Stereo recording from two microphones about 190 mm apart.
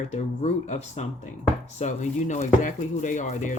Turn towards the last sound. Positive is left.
turn(degrees=40)  # may be behind; listen again after turning